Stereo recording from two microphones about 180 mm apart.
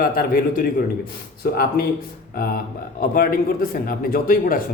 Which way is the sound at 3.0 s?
55° left (ahead or behind).